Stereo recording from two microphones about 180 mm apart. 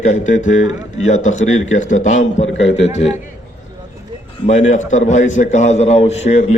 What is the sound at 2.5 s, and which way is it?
Speech, 90° left.